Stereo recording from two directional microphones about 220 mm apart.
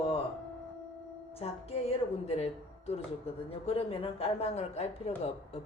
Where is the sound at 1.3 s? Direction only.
25° left (ahead or behind).